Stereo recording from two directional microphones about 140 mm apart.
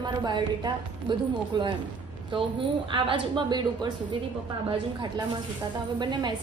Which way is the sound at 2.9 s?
35° right (ahead or behind).